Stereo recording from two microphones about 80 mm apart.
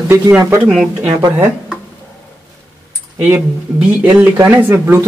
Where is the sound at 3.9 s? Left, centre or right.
Centre.